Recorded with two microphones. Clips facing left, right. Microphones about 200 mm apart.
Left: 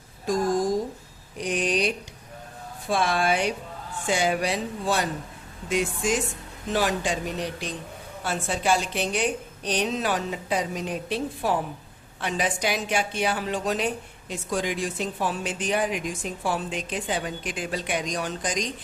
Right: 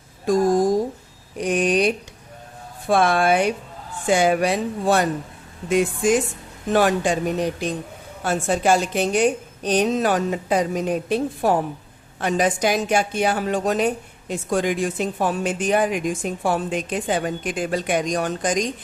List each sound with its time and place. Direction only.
0.3 s a woman's voice: 55° right (ahead or behind)